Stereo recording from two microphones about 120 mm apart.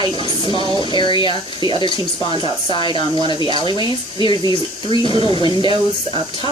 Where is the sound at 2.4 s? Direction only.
40° left (ahead or behind).